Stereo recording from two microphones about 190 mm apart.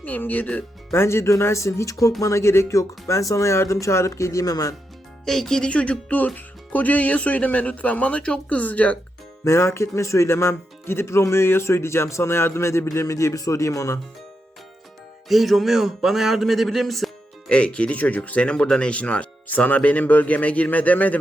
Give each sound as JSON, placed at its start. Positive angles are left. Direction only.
{"t": 0.0, "sound": "speech", "side_deg": 10}
{"t": 5.2, "sound": "speech", "side_deg": 0}
{"t": 15.3, "sound": "speech", "side_deg": 0}